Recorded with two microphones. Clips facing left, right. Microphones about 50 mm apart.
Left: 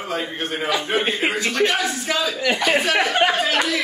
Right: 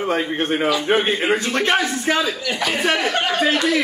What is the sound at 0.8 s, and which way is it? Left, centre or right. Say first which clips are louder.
A man's voice: right 3 dB; right.